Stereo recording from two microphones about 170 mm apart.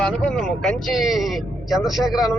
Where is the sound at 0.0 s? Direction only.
5° left (ahead or behind).